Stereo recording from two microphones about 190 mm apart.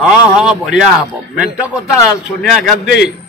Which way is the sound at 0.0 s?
5° right (ahead or behind).